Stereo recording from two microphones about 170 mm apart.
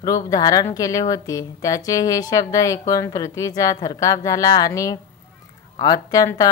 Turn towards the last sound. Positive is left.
turn(degrees=20)  # may be behind; listen again after turning